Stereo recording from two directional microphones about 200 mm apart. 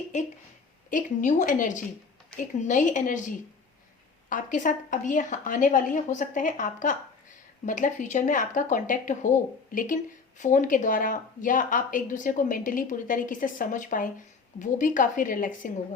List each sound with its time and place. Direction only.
0.1 s speech: 35° left (ahead or behind)